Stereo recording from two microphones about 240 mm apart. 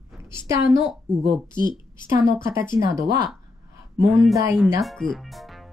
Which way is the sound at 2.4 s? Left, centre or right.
Centre.